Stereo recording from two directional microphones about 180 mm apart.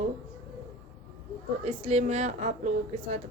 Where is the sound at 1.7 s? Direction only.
35° right (ahead or behind).